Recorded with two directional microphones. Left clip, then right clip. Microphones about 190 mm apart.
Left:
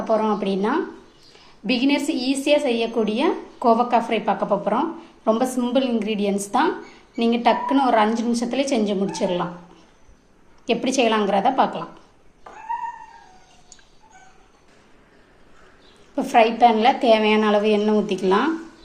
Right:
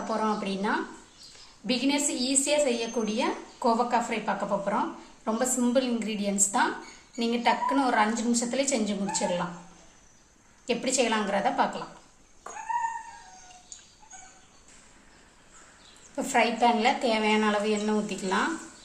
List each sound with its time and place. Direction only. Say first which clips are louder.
0.2 s a woman's voice: left 7 dB; 35° left (ahead or behind)
10.7 s a woman's voice: left 7 dB; 35° left (ahead or behind)
16.1 s a woman's voice: left 8 dB; 35° left (ahead or behind)